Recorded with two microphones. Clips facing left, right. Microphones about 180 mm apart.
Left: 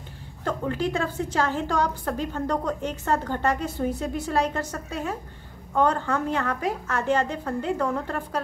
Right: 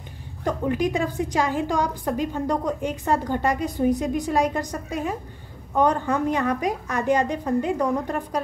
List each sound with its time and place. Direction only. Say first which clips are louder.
0.4 s a woman's voice: right 3 dB; 15° right (ahead or behind)